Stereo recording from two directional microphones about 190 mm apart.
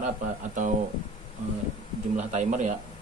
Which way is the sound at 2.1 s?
40° right (ahead or behind).